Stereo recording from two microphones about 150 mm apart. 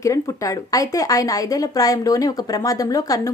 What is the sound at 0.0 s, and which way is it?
A woman's voice, 20° left (ahead or behind).